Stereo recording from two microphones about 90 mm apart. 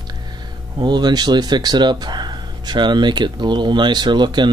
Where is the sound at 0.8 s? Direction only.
55° right (ahead or behind).